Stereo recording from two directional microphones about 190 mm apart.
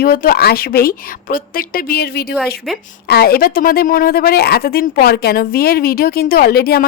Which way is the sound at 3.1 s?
55° left (ahead or behind).